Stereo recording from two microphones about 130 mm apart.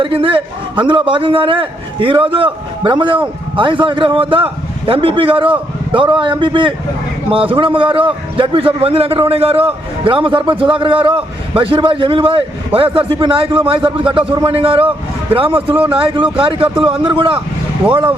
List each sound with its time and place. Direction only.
0.0 s a man's voice: 45° right (ahead or behind)